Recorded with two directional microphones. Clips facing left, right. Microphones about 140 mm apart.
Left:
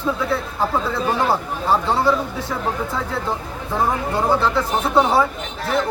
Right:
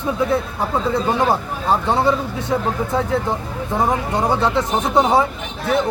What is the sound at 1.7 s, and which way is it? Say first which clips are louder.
Speech: right 1 dB; 20° right (ahead or behind).